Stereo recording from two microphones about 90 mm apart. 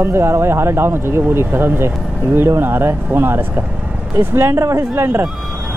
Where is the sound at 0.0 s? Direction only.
30° right (ahead or behind).